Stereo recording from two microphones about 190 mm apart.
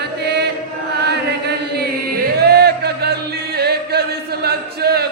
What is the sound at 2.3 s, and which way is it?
Music, 60° right (ahead or behind).